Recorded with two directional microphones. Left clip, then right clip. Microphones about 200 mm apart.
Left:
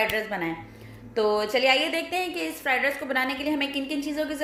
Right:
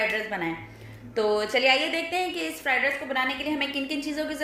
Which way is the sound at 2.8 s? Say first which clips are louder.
Even; 25° left (ahead or behind).